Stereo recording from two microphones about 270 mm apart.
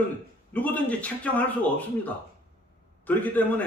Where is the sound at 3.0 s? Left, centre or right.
Centre.